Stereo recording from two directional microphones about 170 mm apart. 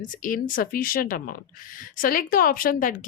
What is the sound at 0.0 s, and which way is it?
Speech, 50° left (ahead or behind).